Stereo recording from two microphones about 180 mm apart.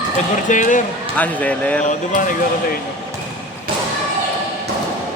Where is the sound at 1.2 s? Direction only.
10° left (ahead or behind).